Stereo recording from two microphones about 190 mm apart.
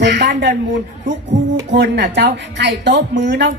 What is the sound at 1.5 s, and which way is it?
Speech, 60° right (ahead or behind).